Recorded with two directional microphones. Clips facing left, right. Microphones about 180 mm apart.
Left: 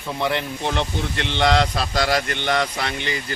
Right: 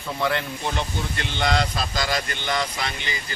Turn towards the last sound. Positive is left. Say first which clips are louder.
# left 4 dB
turn(degrees=60)  # may be behind; listen again after turning